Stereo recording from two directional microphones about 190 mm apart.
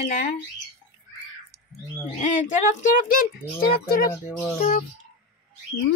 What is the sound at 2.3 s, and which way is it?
Speech, 45° left (ahead or behind).